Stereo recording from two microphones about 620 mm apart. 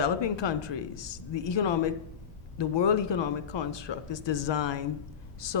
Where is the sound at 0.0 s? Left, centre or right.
Left.